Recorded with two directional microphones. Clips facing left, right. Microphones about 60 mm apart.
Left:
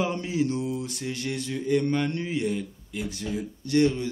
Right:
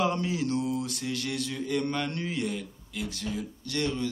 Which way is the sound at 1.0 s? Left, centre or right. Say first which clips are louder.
Left 1 dB; centre.